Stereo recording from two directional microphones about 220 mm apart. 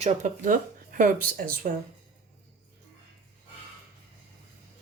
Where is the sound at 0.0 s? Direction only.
35° right (ahead or behind).